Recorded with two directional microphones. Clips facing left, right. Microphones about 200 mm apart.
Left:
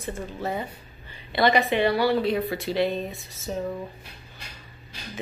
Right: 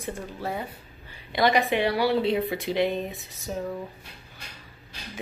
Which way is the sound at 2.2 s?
20° right (ahead or behind).